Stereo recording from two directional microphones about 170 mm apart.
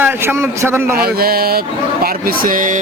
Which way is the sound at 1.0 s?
65° right (ahead or behind).